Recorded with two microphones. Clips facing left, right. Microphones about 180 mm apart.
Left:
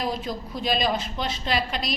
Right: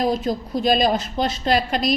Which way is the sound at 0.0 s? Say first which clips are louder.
Right 7 dB; 40° right (ahead or behind).